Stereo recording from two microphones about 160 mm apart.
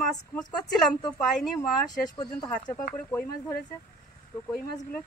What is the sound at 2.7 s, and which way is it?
A man's voice, 10° left (ahead or behind).